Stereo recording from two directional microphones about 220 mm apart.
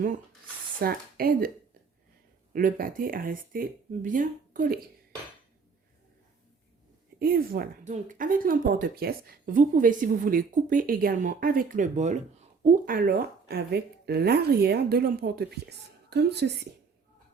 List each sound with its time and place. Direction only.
0.8 s speech: 40° right (ahead or behind)
2.5 s speech: 40° right (ahead or behind)
7.2 s a woman's voice: 45° right (ahead or behind)